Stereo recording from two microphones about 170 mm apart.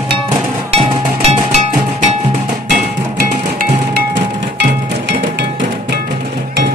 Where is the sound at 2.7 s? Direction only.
55° right (ahead or behind).